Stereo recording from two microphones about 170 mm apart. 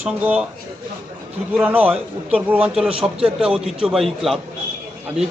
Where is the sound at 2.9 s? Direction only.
35° right (ahead or behind).